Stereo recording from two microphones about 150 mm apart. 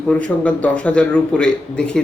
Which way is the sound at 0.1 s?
10° left (ahead or behind).